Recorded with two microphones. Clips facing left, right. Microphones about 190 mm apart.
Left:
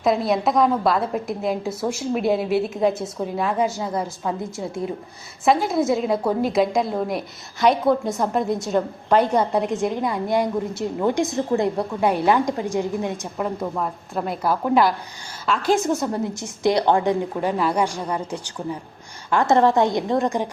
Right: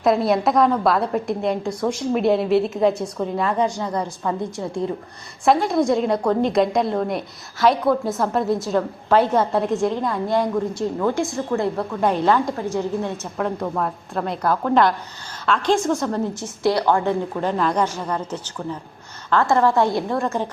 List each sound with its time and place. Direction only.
0.0 s a woman's voice: centre (ahead or behind)
9.9 s a woman's voice: 15° left (ahead or behind)